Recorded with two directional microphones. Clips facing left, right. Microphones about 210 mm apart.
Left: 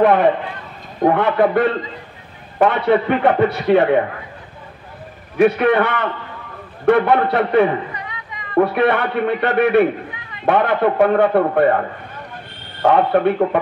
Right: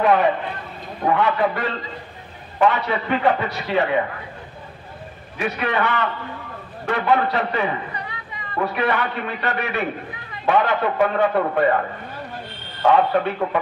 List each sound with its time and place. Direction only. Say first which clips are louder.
0.0 s a man's voice: left 4 dB; 55° left (ahead or behind)
5.4 s a man's voice: left 9 dB; 55° left (ahead or behind)
12.8 s speech: left 3 dB; 55° left (ahead or behind)